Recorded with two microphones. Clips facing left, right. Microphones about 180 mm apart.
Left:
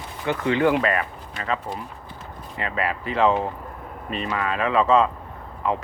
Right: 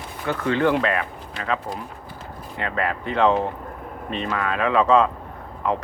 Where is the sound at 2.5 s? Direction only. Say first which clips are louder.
Right 1 dB; centre (ahead or behind).